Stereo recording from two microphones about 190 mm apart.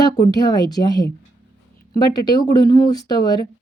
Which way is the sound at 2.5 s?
20° left (ahead or behind).